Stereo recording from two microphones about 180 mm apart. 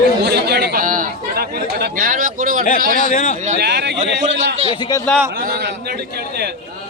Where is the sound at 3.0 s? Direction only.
45° left (ahead or behind).